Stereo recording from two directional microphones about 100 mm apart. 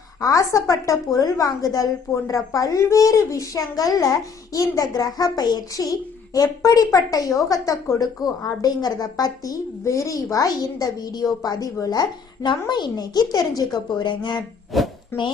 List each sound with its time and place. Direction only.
0.2 s a woman's voice: 35° left (ahead or behind)
13.9 s speech: 50° left (ahead or behind)
14.7 s speech: centre (ahead or behind)